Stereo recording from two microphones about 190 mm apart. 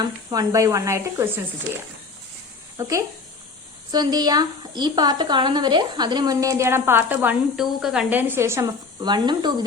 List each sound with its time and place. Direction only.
0.0 s speech: 20° right (ahead or behind)
2.7 s a woman's voice: 15° right (ahead or behind)